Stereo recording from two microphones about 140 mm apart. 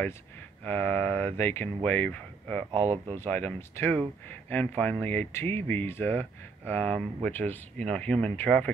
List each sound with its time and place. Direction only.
0.7 s speech: 15° left (ahead or behind)
2.7 s speech: 50° right (ahead or behind)
3.1 s speech: 15° left (ahead or behind)